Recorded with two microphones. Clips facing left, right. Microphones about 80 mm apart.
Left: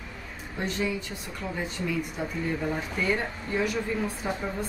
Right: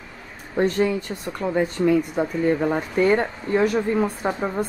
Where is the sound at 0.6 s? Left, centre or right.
Right.